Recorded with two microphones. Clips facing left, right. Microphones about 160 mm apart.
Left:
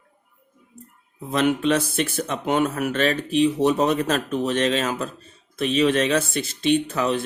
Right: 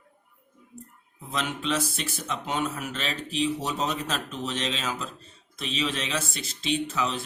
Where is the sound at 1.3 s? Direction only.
55° left (ahead or behind).